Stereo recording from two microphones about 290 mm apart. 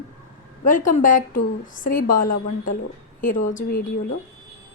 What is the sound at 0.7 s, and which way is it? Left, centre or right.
A woman's voice, left.